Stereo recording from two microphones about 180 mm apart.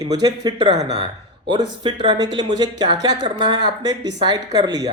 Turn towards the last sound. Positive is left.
turn(degrees=-20)  # may be behind; listen again after turning